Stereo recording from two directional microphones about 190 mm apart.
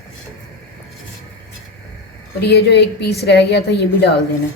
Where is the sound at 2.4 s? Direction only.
60° left (ahead or behind).